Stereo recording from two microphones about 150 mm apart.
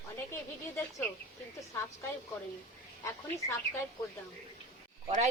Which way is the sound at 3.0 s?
20° left (ahead or behind).